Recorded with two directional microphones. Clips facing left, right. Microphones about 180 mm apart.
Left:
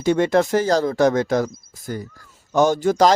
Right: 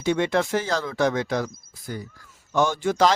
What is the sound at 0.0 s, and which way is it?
Speech, 45° left (ahead or behind).